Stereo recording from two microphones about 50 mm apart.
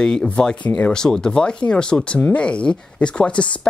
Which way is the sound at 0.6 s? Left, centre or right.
Left.